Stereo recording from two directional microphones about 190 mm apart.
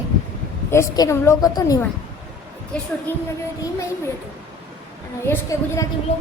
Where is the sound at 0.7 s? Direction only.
15° left (ahead or behind).